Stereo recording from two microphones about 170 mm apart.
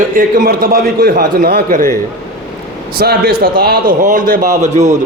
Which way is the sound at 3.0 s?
65° right (ahead or behind).